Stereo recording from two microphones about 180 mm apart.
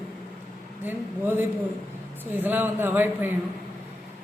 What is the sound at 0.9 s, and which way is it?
A woman's voice, 10° right (ahead or behind).